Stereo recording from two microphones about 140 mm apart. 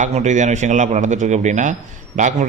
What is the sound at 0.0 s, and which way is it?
A man's voice, 60° right (ahead or behind).